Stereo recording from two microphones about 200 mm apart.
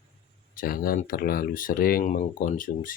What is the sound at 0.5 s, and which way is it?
Speech, 45° left (ahead or behind).